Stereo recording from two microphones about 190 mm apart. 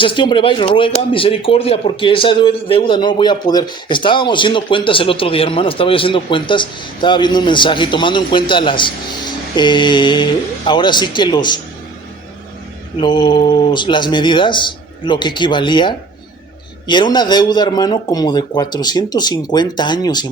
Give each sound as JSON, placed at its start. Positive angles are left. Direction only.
{"t": 0.0, "sound": "speech", "side_deg": 25}
{"t": 13.0, "sound": "speech", "side_deg": 25}